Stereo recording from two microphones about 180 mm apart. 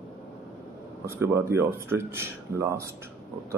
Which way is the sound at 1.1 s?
15° right (ahead or behind).